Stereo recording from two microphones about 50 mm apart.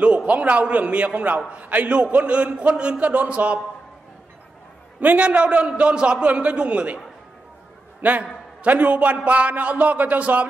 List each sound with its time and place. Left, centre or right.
0.3 s a man's voice: right
5.0 s a man's voice: right
8.0 s a man's voice: right